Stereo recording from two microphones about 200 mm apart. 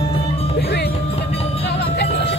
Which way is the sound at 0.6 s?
50° left (ahead or behind).